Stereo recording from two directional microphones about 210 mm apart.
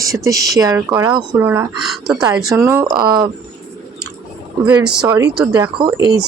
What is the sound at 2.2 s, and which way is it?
Speech, 15° right (ahead or behind).